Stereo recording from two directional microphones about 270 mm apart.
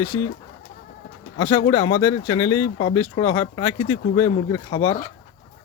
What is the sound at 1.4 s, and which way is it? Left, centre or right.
Speech, centre.